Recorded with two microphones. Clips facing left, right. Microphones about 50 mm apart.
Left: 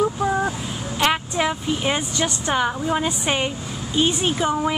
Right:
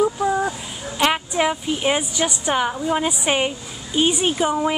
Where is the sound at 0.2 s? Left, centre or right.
Centre.